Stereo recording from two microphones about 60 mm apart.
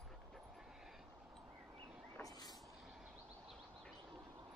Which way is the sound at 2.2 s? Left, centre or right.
Left.